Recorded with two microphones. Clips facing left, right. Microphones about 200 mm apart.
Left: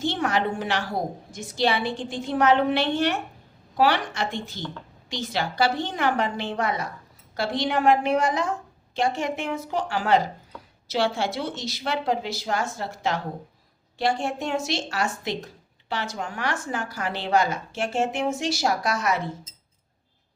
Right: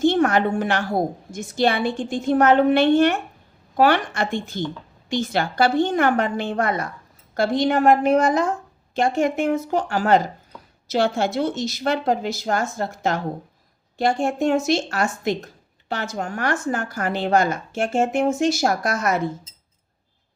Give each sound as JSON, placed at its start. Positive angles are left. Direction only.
{"t": 0.0, "sound": "a woman's voice", "side_deg": -50}